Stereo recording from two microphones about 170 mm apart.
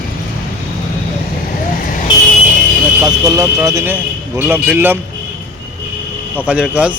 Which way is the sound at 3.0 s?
20° right (ahead or behind).